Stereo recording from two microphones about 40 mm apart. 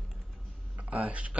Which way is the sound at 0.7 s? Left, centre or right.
Right.